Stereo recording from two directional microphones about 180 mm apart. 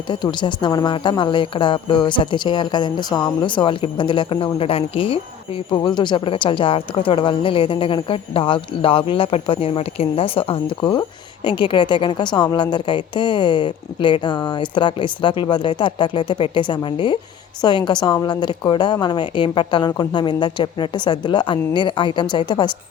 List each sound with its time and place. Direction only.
0.1 s a woman's voice: 25° left (ahead or behind)